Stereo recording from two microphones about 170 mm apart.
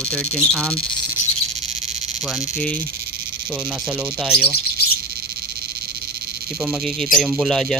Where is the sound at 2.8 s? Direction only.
65° right (ahead or behind).